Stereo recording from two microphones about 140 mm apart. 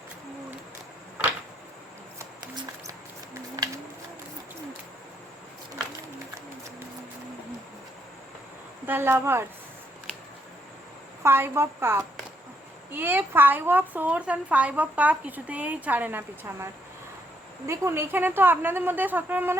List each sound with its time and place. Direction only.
8.9 s a woman's voice: 15° right (ahead or behind)
11.2 s a woman's voice: 15° right (ahead or behind)
17.7 s a woman's voice: 20° right (ahead or behind)